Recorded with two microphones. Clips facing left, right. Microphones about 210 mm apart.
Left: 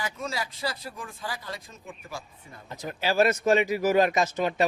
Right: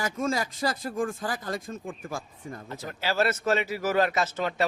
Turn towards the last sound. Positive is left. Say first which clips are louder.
# left 2 dB
turn(degrees=15)  # may be behind; listen again after turning